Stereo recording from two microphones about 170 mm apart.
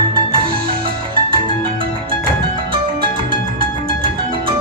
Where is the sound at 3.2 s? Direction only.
30° right (ahead or behind).